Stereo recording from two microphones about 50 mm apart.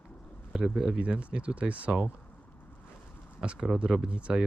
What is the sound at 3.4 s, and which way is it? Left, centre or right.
Speech, centre.